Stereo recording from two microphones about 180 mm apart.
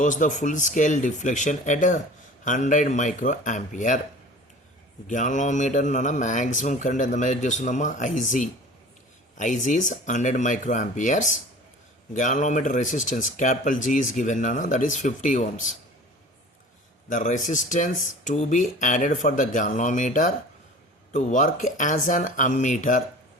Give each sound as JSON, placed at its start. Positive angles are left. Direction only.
{"t": 0.0, "sound": "speech", "side_deg": 45}
{"t": 5.0, "sound": "speech", "side_deg": 45}
{"t": 17.1, "sound": "speech", "side_deg": 45}